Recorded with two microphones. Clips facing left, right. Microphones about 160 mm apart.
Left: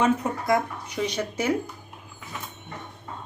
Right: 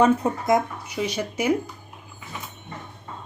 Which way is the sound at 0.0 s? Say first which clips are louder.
Right 4 dB; 25° right (ahead or behind).